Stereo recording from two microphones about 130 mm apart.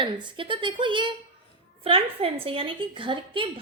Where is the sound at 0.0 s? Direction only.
40° right (ahead or behind).